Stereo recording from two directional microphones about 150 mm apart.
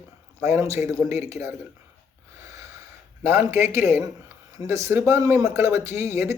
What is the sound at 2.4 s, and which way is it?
Snort, 20° right (ahead or behind).